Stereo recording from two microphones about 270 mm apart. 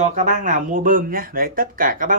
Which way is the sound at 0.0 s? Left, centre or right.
Right.